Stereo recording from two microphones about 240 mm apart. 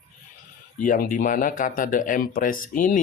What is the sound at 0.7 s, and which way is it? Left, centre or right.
Speech, left.